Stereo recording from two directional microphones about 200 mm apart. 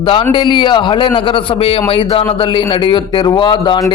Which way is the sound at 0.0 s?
25° left (ahead or behind).